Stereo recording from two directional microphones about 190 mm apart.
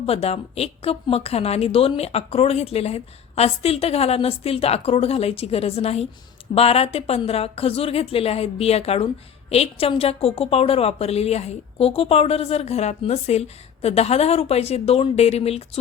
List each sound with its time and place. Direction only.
0.0 s a woman's voice: 30° left (ahead or behind)